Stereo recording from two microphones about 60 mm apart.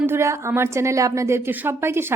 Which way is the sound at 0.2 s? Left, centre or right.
Right.